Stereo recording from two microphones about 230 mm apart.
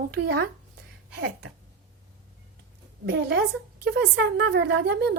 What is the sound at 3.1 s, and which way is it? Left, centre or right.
Speech, right.